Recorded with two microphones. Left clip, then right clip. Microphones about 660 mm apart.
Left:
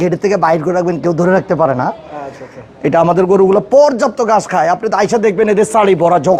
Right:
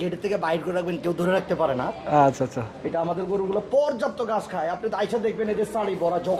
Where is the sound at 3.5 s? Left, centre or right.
Left.